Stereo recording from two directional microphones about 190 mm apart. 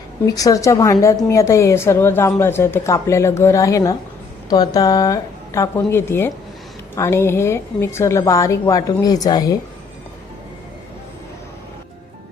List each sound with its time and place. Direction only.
0.3 s a woman's voice: 20° left (ahead or behind)